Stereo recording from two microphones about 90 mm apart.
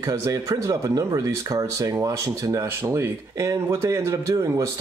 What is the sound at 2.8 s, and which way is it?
A man's voice, 30° right (ahead or behind).